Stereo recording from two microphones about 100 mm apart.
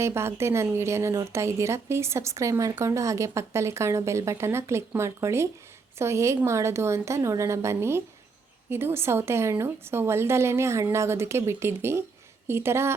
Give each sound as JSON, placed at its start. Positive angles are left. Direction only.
{"t": 0.0, "sound": "a woman's voice", "side_deg": -25}